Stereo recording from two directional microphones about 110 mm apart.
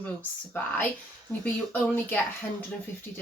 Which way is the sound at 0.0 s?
15° left (ahead or behind).